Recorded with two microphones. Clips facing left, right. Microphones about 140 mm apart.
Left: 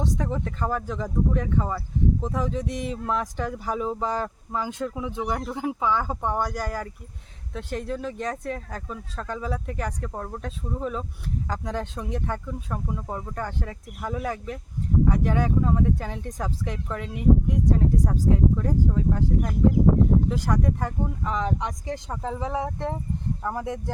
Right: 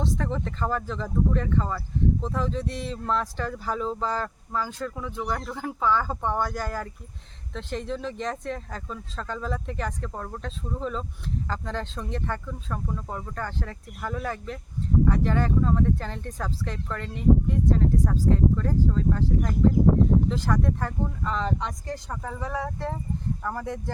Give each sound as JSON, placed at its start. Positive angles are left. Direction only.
{"t": 0.0, "sound": "speech", "side_deg": 10}